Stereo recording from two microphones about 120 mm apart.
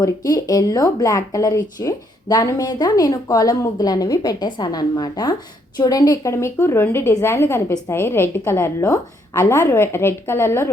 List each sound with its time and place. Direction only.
0.0 s a woman's voice: 30° left (ahead or behind)